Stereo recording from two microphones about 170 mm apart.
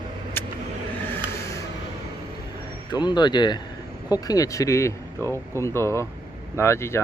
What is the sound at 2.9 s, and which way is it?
Speech, 25° left (ahead or behind).